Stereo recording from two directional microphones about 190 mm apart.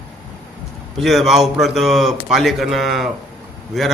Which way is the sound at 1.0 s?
Centre (ahead or behind).